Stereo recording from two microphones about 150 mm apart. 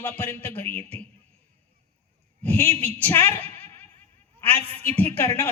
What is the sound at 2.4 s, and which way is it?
Speech, 15° left (ahead or behind).